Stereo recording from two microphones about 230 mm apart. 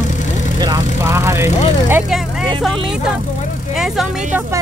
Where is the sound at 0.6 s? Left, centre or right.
Centre.